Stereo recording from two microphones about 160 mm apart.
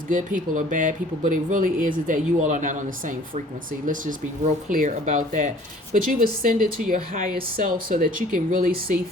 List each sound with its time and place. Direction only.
0.1 s speech: 55° right (ahead or behind)
4.7 s speech: 55° right (ahead or behind)